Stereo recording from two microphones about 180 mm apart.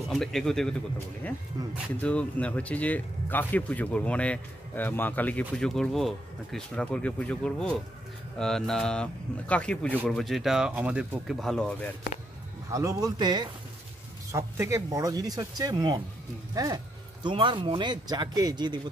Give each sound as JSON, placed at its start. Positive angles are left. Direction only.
{"t": 0.1, "sound": "speech", "side_deg": 0}
{"t": 12.7, "sound": "speech", "side_deg": -20}